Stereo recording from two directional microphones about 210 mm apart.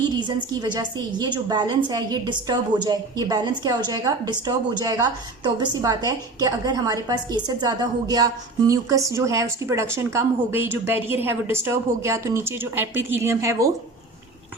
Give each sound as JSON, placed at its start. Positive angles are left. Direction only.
{"t": 0.0, "sound": "a woman's voice", "side_deg": -20}